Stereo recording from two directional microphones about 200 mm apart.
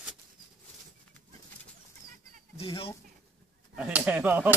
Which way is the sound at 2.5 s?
25° left (ahead or behind).